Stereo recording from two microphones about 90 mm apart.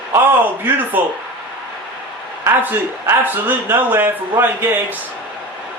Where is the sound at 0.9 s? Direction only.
20° right (ahead or behind).